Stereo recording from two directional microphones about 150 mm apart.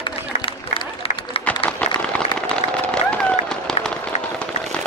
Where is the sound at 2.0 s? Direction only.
5° left (ahead or behind).